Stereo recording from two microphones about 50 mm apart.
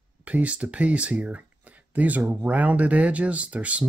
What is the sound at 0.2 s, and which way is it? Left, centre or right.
Speech, right.